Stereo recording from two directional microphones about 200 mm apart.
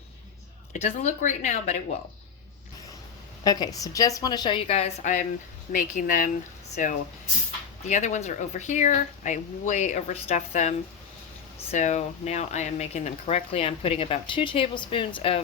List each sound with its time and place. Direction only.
0.7 s speech: 35° left (ahead or behind)
3.4 s speech: 20° left (ahead or behind); by 6.3 s 40° left (ahead or behind)
7.9 s speech: 35° left (ahead or behind)